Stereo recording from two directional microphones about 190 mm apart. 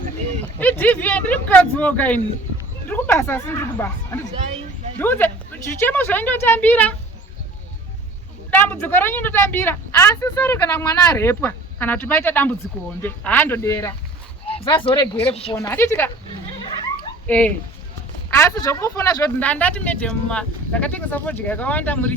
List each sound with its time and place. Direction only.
0.6 s a woman's voice: 10° left (ahead or behind)
8.4 s a woman's voice: 10° left (ahead or behind)
14.4 s bow-wow: 30° left (ahead or behind)
15.3 s speech: 30° left (ahead or behind)
15.5 s a woman's voice: 10° left (ahead or behind)
17.2 s a woman's voice: 10° left (ahead or behind)